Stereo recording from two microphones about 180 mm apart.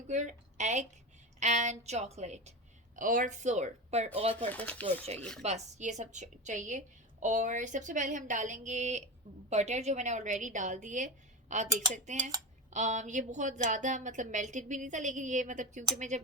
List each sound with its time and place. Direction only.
0.1 s a woman's voice: 40° right (ahead or behind)
2.9 s a woman's voice: 50° right (ahead or behind)
4.8 s speech: 10° left (ahead or behind)
5.4 s a woman's voice: 40° right (ahead or behind)